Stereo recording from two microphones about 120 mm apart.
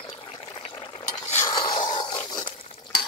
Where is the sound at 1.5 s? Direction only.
40° left (ahead or behind).